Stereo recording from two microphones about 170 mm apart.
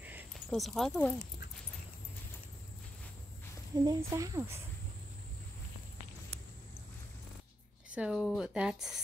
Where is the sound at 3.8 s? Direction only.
20° right (ahead or behind).